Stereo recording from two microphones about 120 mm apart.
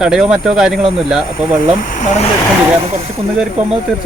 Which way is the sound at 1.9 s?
90° left.